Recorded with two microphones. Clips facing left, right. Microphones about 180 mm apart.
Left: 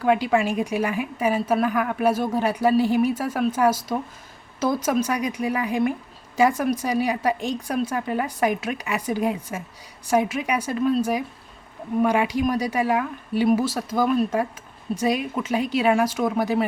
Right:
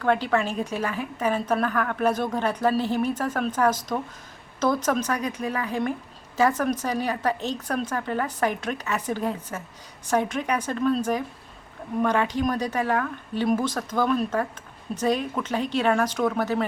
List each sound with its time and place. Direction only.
0.0 s a woman's voice: 10° left (ahead or behind)